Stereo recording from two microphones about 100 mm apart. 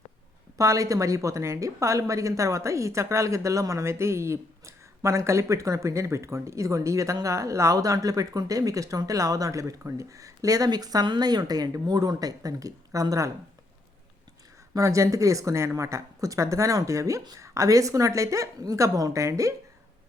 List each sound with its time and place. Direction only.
0.5 s a woman's voice: 35° right (ahead or behind)
14.7 s a woman's voice: 35° right (ahead or behind)